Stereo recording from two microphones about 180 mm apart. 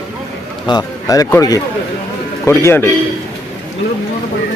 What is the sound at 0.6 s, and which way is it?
A man's voice, 20° left (ahead or behind).